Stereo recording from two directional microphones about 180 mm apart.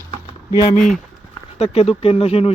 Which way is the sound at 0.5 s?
25° left (ahead or behind).